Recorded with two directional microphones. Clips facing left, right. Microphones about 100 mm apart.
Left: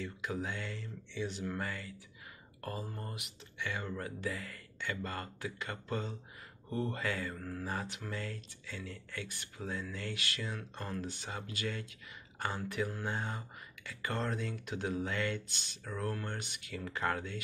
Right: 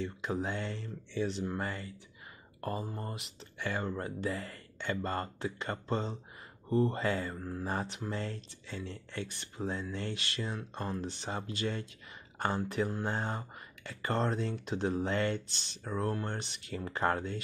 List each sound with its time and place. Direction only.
0.0 s speech: 25° right (ahead or behind)
11.2 s speech: 35° right (ahead or behind)